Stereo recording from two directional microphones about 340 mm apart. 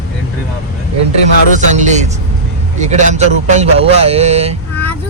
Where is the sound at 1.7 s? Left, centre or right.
Right.